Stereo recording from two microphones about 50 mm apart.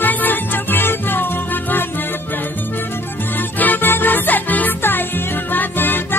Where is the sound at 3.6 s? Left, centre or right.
Left.